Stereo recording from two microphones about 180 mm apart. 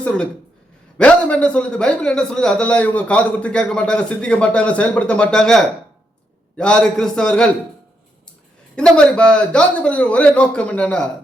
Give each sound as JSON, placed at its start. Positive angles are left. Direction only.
{"t": 0.9, "sound": "a man's voice", "side_deg": 5}
{"t": 8.7, "sound": "a man's voice", "side_deg": 5}